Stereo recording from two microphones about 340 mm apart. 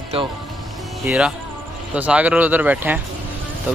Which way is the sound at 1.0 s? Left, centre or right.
Centre.